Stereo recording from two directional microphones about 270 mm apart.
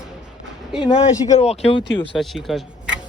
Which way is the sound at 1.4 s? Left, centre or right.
Left.